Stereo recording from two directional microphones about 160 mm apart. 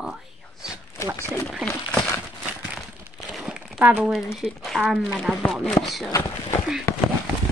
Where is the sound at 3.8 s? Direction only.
10° right (ahead or behind).